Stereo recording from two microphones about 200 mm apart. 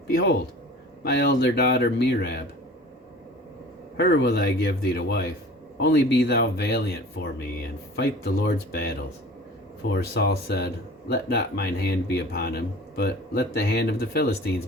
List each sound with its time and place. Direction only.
0.1 s speech: 50° left (ahead or behind)
3.9 s speech: 55° left (ahead or behind)
7.9 s speech: 50° left (ahead or behind)